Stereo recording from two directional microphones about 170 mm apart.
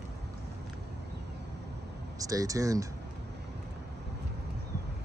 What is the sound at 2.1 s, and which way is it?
Speech, 20° right (ahead or behind).